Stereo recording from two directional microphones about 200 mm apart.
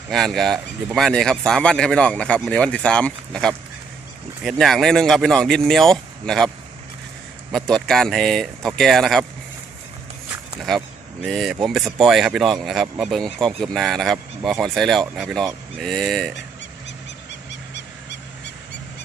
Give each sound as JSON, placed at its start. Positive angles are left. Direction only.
{"t": 0.1, "sound": "speech", "side_deg": 0}
{"t": 7.5, "sound": "speech", "side_deg": 0}
{"t": 10.6, "sound": "speech", "side_deg": 0}
{"t": 17.5, "sound": "a sound", "side_deg": 60}